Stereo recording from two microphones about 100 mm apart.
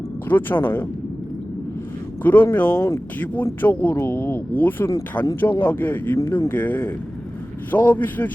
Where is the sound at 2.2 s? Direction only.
20° left (ahead or behind).